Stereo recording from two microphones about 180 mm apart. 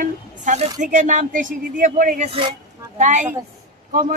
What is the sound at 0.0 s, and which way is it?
Speech, 45° right (ahead or behind).